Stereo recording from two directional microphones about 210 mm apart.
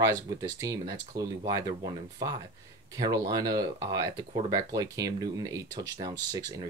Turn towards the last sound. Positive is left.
turn(degrees=-15)  # may be behind; listen again after turning